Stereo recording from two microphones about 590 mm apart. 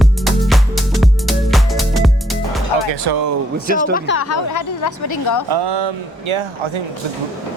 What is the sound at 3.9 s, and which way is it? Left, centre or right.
A woman's voice, centre.